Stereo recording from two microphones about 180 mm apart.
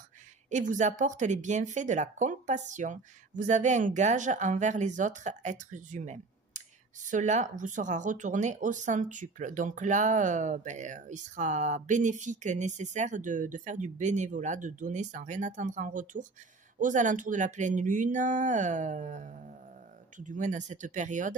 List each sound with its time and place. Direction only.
0.5 s speech: 45° right (ahead or behind)